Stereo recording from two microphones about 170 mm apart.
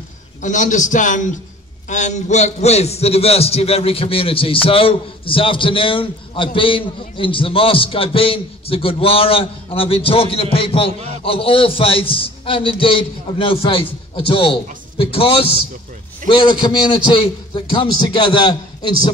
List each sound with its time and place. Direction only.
0.4 s a man's voice: 45° left (ahead or behind); by 19.0 s 25° left (ahead or behind)